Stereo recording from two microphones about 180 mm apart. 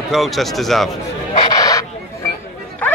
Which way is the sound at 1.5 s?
20° left (ahead or behind).